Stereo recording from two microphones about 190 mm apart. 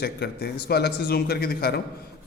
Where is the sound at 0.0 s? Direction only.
60° left (ahead or behind).